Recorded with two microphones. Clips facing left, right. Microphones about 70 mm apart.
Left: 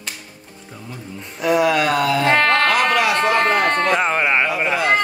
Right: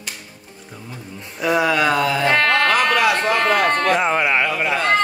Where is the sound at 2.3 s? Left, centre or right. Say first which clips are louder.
Right 1 dB; left.